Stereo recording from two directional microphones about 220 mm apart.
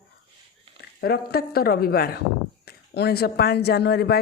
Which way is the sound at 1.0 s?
45° left (ahead or behind).